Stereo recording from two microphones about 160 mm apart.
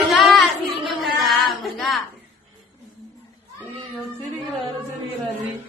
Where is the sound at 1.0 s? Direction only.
Centre (ahead or behind).